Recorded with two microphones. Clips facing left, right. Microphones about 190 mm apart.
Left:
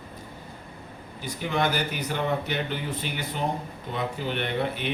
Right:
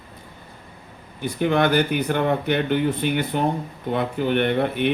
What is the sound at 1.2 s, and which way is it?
Speech, 60° right (ahead or behind).